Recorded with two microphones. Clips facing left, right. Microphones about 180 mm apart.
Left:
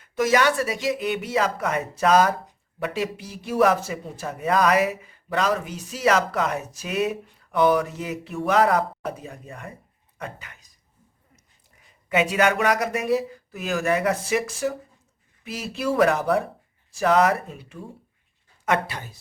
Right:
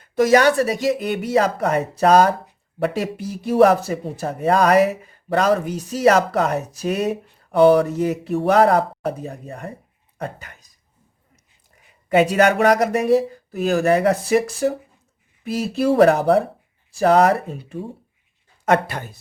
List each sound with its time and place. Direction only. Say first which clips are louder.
0.0 s speech: right 6 dB; 40° right (ahead or behind)
12.0 s speech: right 5 dB; 40° right (ahead or behind)
18.7 s speech: right 6 dB; 50° right (ahead or behind)